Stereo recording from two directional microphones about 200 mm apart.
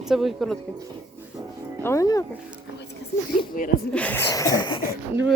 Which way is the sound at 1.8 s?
15° left (ahead or behind).